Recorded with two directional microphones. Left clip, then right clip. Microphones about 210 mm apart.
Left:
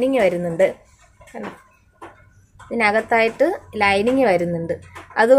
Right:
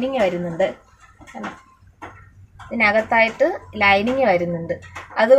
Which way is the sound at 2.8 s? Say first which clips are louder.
Right 1 dB; 45° left (ahead or behind).